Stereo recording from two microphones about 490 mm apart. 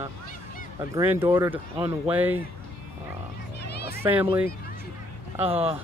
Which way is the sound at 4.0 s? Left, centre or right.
Centre.